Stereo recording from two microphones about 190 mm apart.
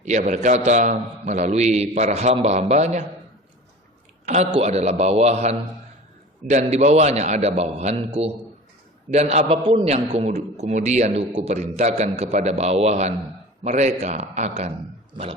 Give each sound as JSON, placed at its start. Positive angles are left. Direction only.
{"t": 0.0, "sound": "a man's voice", "side_deg": -40}
{"t": 4.6, "sound": "a man's voice", "side_deg": -35}